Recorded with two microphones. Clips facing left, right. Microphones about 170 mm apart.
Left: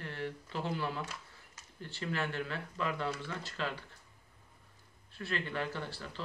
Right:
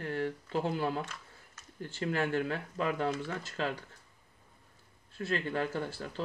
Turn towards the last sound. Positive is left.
turn(degrees=-45)  # may be behind; listen again after turning